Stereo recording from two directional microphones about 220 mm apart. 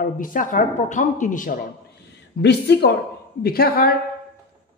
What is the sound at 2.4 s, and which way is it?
Speech, 50° left (ahead or behind).